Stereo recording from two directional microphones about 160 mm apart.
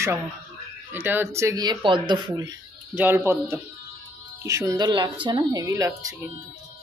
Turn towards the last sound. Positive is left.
turn(degrees=-20)  # may be behind; listen again after turning